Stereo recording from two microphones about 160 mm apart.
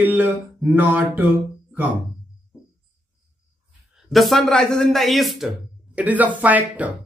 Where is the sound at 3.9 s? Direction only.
Centre (ahead or behind).